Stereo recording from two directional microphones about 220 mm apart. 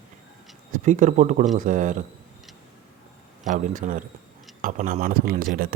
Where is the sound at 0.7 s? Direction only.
35° right (ahead or behind).